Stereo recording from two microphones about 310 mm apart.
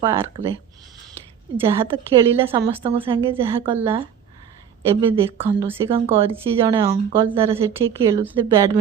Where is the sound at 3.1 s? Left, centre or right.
Centre.